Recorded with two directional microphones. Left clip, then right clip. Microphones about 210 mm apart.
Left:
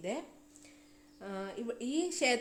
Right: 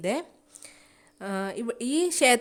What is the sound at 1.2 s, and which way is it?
A woman's voice, 45° right (ahead or behind).